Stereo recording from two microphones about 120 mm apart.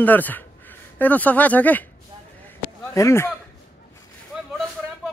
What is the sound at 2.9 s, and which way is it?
Speech, 25° left (ahead or behind).